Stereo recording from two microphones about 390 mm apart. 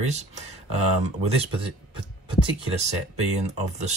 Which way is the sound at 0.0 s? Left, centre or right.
Centre.